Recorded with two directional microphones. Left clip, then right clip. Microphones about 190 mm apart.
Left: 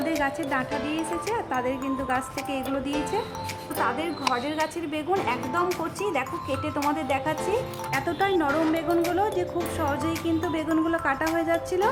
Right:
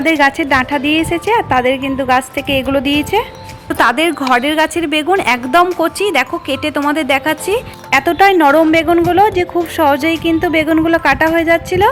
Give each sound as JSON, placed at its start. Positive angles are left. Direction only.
{"t": 0.0, "sound": "a woman's voice", "side_deg": -30}